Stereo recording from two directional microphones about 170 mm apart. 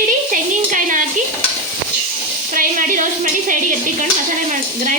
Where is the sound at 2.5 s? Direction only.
55° right (ahead or behind).